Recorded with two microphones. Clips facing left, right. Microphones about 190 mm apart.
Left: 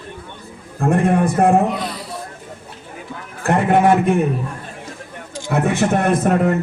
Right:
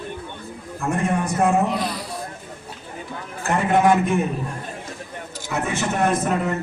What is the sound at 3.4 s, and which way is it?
Speech, 60° left (ahead or behind).